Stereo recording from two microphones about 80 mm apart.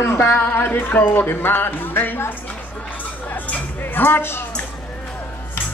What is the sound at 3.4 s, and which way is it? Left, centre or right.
Music, left.